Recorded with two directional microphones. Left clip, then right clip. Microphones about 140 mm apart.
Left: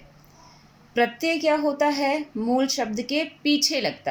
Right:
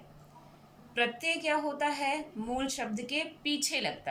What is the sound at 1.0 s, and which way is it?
A woman's voice, 45° left (ahead or behind).